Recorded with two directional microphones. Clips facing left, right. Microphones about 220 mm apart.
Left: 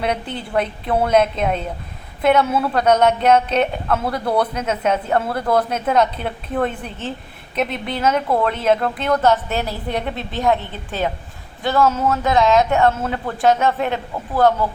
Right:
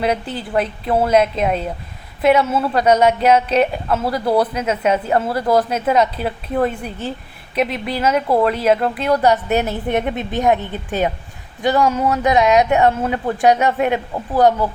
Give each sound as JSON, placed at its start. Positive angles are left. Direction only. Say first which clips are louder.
{"t": 0.0, "sound": "a woman's voice", "louder": "right 3 dB", "side_deg": -5}